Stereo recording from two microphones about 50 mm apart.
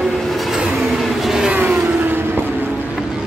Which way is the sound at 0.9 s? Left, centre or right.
Centre.